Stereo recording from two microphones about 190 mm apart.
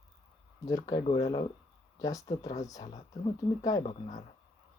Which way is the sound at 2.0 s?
20° left (ahead or behind).